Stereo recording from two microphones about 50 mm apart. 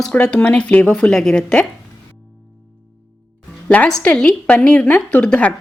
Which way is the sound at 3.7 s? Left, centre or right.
Left.